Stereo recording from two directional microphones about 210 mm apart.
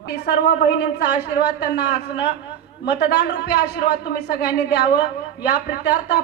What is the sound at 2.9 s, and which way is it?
A woman's voice, 55° left (ahead or behind).